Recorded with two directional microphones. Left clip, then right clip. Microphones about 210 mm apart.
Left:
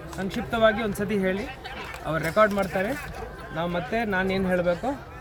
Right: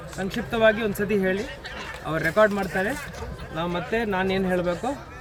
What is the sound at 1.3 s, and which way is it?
Speech, 45° left (ahead or behind).